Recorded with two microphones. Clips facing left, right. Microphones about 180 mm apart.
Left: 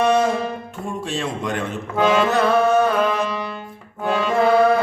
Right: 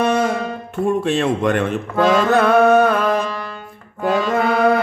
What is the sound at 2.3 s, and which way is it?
Music, 60° right (ahead or behind).